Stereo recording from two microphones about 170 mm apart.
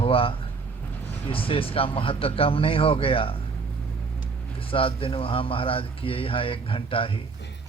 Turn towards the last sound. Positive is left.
turn(degrees=30)  # may be behind; listen again after turning